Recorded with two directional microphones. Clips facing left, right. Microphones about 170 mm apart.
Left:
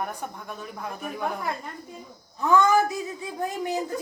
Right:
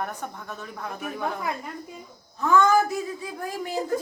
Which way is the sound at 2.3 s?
15° left (ahead or behind).